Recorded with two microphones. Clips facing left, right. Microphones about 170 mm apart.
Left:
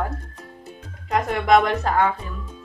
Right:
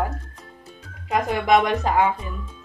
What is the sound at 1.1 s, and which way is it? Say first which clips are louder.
Speech: left 1 dB; 5° right (ahead or behind).